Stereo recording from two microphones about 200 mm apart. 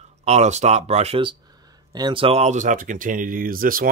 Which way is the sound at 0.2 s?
35° right (ahead or behind).